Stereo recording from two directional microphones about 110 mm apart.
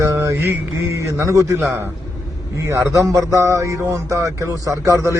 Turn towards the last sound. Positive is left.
turn(degrees=-25)  # may be behind; listen again after turning